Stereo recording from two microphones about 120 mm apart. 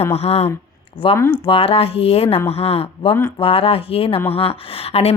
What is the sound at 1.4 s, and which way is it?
Speech, 50° left (ahead or behind).